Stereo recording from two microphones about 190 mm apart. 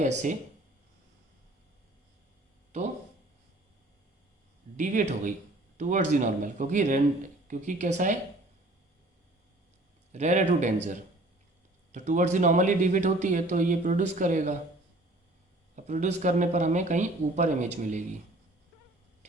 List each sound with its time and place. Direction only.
0.0 s speech: 40° right (ahead or behind)
2.7 s speech: 40° right (ahead or behind)
4.8 s speech: 40° right (ahead or behind)
10.1 s speech: 35° right (ahead or behind)
15.7 s speech: 40° right (ahead or behind)
19.2 s a sound: 35° right (ahead or behind)